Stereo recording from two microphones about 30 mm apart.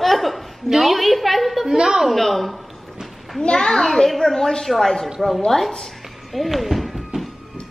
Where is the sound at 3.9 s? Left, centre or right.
Centre.